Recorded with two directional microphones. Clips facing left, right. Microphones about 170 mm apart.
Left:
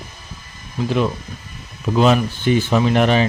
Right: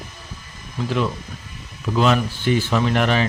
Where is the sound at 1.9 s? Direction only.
20° left (ahead or behind).